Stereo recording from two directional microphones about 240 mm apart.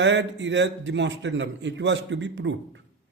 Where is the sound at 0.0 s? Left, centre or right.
Right.